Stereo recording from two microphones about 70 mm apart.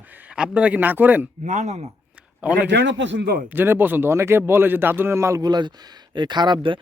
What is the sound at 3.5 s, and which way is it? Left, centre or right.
Speech, right.